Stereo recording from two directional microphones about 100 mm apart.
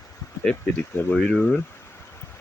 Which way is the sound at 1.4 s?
20° left (ahead or behind).